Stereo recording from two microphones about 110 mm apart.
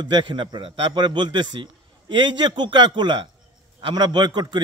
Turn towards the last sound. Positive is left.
turn(degrees=-40)  # may be behind; listen again after turning